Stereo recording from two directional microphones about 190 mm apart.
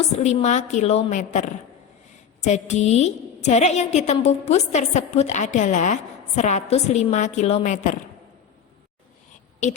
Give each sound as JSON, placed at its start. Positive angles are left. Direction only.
{"t": 0.2, "sound": "a woman's voice", "side_deg": 35}